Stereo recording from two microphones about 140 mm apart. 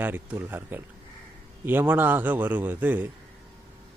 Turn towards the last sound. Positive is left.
turn(degrees=-10)  # may be behind; listen again after turning